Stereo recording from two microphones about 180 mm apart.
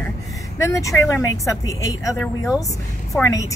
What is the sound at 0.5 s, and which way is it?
Speech, 15° left (ahead or behind).